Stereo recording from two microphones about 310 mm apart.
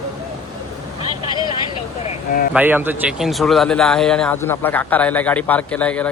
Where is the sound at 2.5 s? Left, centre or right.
Centre.